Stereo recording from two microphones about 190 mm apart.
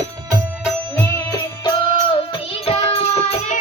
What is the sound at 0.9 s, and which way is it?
Music, 15° left (ahead or behind).